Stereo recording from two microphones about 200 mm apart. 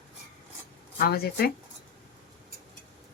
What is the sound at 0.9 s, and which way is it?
Speech, 50° left (ahead or behind).